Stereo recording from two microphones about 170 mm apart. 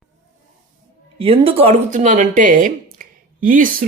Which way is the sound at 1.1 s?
35° right (ahead or behind).